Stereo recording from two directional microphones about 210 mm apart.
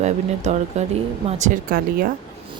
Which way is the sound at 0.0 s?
35° right (ahead or behind).